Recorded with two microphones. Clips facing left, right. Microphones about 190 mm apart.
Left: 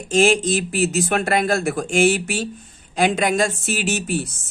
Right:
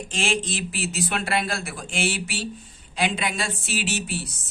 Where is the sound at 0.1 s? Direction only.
45° left (ahead or behind).